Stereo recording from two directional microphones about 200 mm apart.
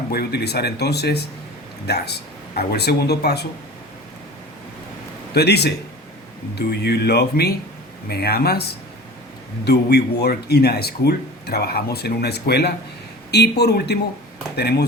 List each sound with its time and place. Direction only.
0.1 s speech: 55° left (ahead or behind)
5.3 s speech: 55° left (ahead or behind)
9.6 s speech: 55° left (ahead or behind)